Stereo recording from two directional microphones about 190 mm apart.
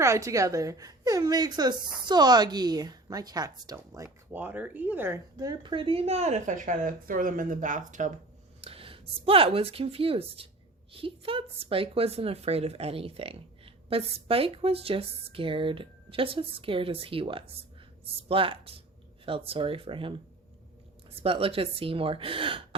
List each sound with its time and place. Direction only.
0.0 s a woman's voice: 15° right (ahead or behind); by 8.1 s 40° right (ahead or behind)
8.6 s a woman's voice: 30° right (ahead or behind)
21.2 s a woman's voice: 30° right (ahead or behind)